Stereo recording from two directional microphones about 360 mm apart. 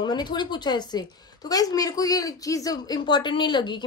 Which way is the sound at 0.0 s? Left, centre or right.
Centre.